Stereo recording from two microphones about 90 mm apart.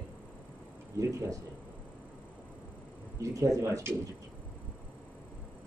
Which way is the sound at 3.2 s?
40° right (ahead or behind).